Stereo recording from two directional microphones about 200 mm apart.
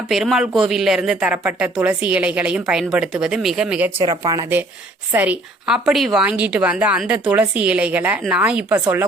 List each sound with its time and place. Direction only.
0.1 s speech: centre (ahead or behind)
4.0 s a woman's voice: 20° right (ahead or behind)